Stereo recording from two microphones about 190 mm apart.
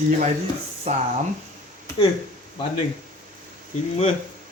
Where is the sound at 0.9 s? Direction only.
30° right (ahead or behind).